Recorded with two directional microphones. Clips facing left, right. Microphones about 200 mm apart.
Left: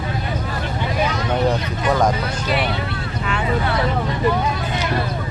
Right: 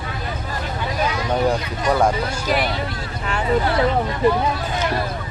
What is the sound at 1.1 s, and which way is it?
Vehicle, 10° right (ahead or behind).